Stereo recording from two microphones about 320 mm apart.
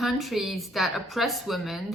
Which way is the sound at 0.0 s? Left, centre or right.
Centre.